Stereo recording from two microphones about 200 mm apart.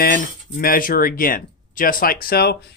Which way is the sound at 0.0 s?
45° left (ahead or behind).